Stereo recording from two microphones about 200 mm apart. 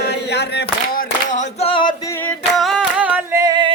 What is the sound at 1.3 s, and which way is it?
Singing, 30° left (ahead or behind).